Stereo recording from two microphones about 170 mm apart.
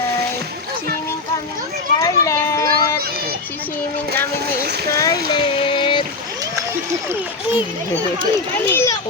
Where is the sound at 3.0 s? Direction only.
65° right (ahead or behind).